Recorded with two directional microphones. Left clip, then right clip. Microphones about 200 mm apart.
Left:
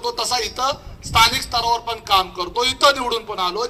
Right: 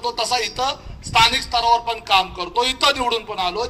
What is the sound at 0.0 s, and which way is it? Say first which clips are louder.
A man's voice: right 1 dB; 20° right (ahead or behind).